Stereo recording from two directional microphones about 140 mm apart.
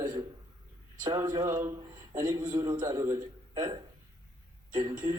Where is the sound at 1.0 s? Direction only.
25° right (ahead or behind).